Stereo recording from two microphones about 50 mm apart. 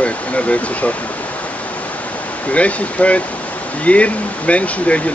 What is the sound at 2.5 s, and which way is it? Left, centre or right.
Speech, left.